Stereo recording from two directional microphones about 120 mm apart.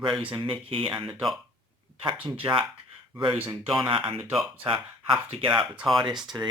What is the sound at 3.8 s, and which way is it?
Speech, 45° right (ahead or behind).